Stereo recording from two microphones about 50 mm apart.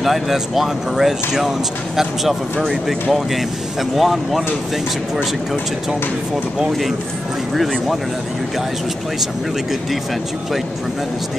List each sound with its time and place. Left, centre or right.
0.0 s speech: centre
2.6 s speech: centre